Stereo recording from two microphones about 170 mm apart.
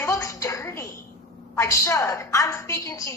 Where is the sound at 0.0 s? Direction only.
20° left (ahead or behind).